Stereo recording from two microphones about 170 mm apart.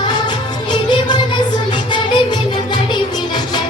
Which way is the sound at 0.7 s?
25° left (ahead or behind).